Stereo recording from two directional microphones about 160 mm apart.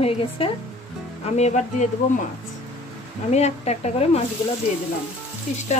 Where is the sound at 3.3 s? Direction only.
45° left (ahead or behind).